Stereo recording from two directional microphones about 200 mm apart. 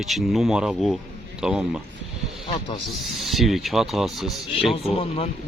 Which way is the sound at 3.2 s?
Centre (ahead or behind).